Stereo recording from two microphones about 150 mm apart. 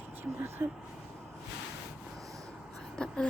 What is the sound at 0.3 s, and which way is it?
Speech, 15° right (ahead or behind).